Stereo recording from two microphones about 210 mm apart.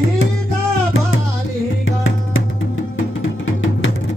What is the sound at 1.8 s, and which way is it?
Music, 70° left (ahead or behind).